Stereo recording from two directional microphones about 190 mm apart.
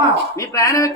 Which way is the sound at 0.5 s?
15° left (ahead or behind).